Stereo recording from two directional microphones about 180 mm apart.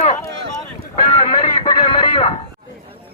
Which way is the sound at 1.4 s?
30° left (ahead or behind).